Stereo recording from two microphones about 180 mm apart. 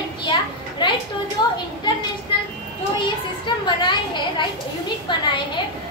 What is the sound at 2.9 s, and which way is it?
A child's voice, 25° left (ahead or behind).